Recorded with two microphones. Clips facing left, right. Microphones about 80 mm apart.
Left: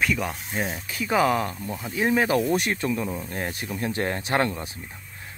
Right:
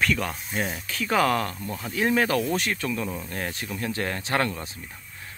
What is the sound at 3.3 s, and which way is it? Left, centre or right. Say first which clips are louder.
Speech: left 1 dB; left.